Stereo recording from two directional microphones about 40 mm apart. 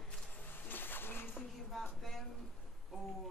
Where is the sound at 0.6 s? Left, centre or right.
Left.